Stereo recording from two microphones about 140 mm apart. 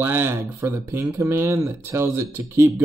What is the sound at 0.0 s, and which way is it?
Speech, 15° right (ahead or behind).